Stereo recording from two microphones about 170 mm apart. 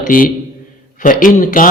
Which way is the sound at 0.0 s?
55° left (ahead or behind).